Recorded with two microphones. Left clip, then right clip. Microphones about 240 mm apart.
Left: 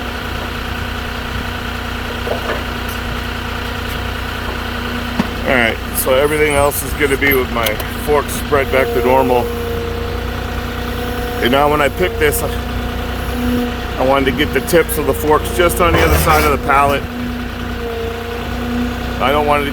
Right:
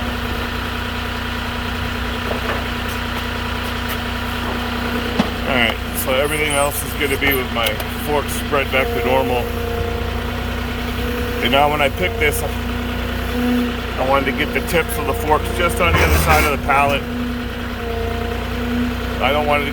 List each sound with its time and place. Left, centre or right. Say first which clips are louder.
5.5 s speech: left 5 dB; centre
11.4 s speech: left 3 dB; left
14.1 s speech: left 3 dB; left
19.2 s speech: left 3 dB; left